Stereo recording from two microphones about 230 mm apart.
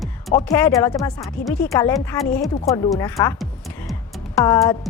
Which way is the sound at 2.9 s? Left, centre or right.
Centre.